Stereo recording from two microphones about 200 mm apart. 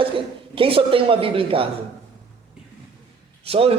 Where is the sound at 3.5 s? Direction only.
30° right (ahead or behind).